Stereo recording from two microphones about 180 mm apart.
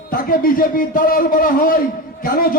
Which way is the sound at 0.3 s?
50° left (ahead or behind).